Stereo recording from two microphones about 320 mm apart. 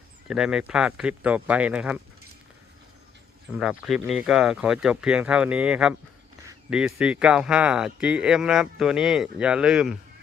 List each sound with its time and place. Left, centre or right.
0.3 s speech: centre
3.5 s speech: centre